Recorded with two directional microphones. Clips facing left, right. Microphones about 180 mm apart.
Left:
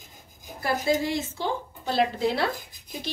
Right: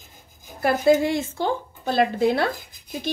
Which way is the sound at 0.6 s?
55° right (ahead or behind).